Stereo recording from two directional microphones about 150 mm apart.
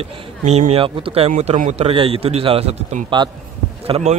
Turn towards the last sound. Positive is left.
turn(degrees=-45)  # may be behind; listen again after turning